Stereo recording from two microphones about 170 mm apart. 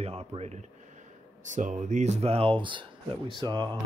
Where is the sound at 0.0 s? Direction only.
35° right (ahead or behind).